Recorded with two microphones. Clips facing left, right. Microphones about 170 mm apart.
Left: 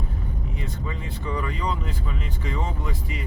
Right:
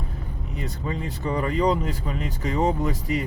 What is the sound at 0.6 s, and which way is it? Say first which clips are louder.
Speech: right 7 dB; 40° right (ahead or behind).